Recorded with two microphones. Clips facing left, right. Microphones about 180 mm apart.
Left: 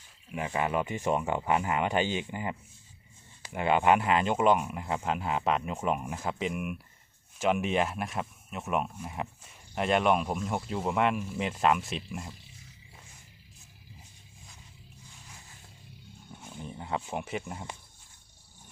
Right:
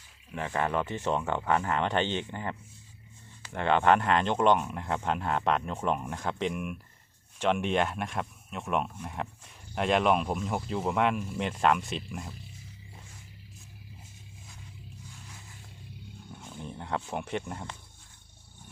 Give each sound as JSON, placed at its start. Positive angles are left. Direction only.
{"t": 0.3, "sound": "speech", "side_deg": 10}
{"t": 16.6, "sound": "speech", "side_deg": 0}